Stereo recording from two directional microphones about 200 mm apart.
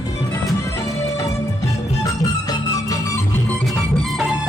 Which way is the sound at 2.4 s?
20° left (ahead or behind).